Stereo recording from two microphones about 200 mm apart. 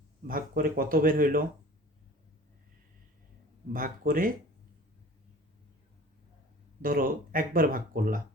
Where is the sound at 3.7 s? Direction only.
45° right (ahead or behind).